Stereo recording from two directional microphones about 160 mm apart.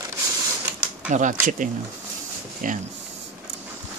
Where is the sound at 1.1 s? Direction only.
50° right (ahead or behind).